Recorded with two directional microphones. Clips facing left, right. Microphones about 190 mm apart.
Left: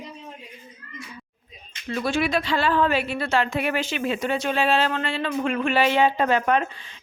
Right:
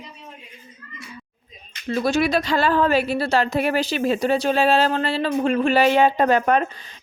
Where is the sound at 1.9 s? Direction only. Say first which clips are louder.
Right 4 dB; 40° right (ahead or behind).